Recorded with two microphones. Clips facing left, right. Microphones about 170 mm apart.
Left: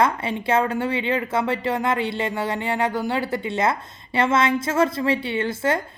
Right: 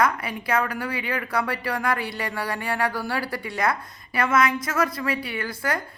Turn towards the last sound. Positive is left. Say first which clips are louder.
# left 6 dB
turn(degrees=25)  # may be behind; listen again after turning